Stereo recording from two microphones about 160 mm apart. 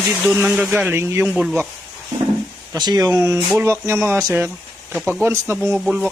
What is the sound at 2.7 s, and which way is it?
Speech, 25° right (ahead or behind).